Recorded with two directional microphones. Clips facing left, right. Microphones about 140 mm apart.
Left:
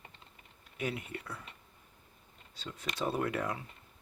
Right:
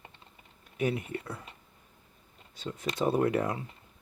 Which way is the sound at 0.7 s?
30° right (ahead or behind).